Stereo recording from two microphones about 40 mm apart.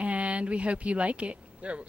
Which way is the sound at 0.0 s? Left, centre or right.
Right.